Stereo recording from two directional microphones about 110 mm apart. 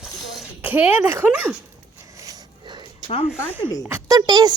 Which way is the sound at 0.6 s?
15° right (ahead or behind).